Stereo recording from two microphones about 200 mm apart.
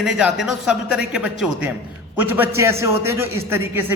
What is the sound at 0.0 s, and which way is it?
A man's voice, centre (ahead or behind).